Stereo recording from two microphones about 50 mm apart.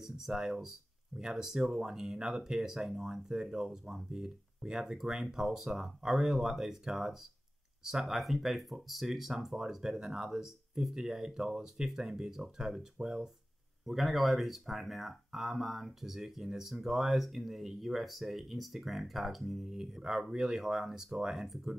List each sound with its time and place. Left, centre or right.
0.0 s speech: centre